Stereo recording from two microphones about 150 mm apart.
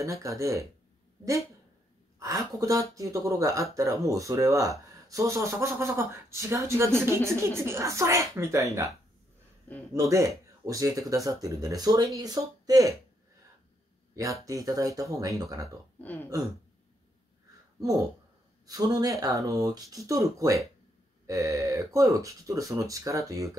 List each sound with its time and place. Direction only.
0.0 s speech: 20° right (ahead or behind)
2.1 s speech: 20° right (ahead or behind)
9.9 s speech: 20° right (ahead or behind)
14.1 s speech: 20° right (ahead or behind)
16.0 s speech: 10° left (ahead or behind)
18.7 s speech: 25° right (ahead or behind)